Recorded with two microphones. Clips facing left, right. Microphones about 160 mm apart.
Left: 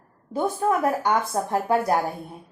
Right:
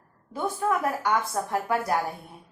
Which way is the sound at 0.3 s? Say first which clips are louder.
Left 4 dB; 25° left (ahead or behind).